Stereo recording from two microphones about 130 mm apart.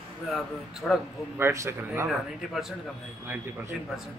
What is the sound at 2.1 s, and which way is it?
Speech, centre (ahead or behind).